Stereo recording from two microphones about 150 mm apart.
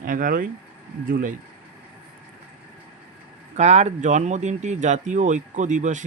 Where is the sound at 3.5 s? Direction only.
50° right (ahead or behind).